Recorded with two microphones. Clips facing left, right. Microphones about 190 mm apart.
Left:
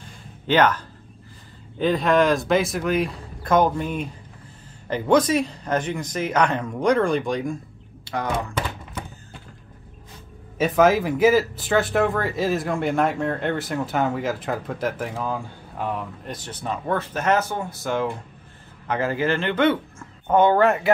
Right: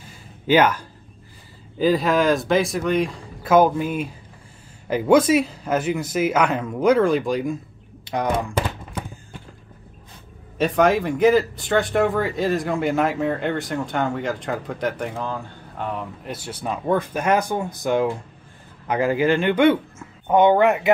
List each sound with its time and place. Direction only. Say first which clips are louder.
0.0 s a sound: right 4 dB; 10° right (ahead or behind)
1.8 s speech: even; centre (ahead or behind)
8.0 s speech: right 3 dB; 15° right (ahead or behind)
10.6 s speech: even; centre (ahead or behind)
16.3 s speech: right 1 dB; 10° right (ahead or behind)